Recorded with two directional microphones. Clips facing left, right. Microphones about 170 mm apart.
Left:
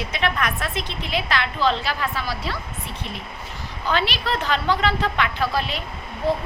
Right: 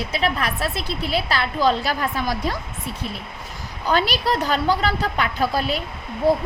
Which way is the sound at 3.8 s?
40° right (ahead or behind).